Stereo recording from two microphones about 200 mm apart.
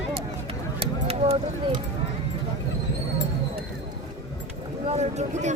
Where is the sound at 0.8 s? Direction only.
30° right (ahead or behind).